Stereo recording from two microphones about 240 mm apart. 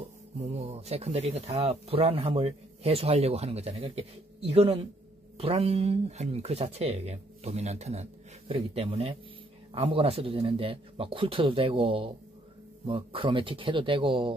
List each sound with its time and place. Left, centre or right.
0.4 s speech: right